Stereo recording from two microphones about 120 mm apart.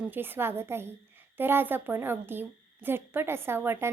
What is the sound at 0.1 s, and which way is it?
A woman's voice, 15° right (ahead or behind).